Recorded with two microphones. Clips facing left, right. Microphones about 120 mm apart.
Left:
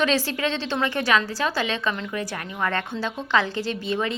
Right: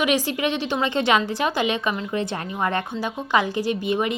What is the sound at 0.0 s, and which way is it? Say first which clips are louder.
A woman's voice: right 1 dB; 15° right (ahead or behind).